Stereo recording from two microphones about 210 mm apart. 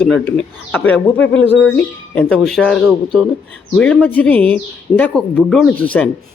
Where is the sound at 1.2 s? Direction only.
65° left (ahead or behind).